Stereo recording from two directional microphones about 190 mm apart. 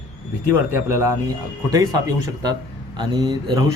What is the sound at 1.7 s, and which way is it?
Speech, 20° right (ahead or behind).